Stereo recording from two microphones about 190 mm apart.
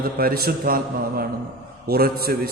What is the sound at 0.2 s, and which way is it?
Mantra, 50° right (ahead or behind).